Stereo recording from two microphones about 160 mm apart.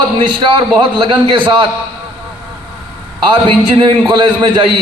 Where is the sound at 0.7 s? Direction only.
30° right (ahead or behind).